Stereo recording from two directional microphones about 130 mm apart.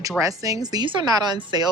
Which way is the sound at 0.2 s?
25° right (ahead or behind).